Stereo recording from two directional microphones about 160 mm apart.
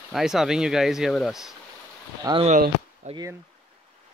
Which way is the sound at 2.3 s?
25° right (ahead or behind).